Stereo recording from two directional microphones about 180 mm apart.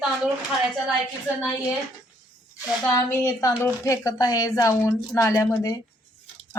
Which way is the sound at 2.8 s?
15° left (ahead or behind).